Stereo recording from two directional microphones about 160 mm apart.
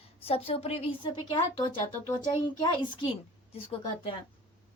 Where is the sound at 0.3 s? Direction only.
35° left (ahead or behind).